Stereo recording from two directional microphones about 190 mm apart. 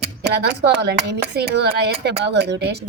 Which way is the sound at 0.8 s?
60° right (ahead or behind).